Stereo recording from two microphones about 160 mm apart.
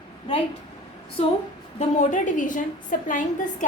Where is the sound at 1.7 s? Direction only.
45° left (ahead or behind).